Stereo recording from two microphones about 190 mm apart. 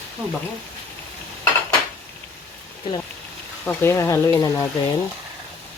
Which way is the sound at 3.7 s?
10° left (ahead or behind).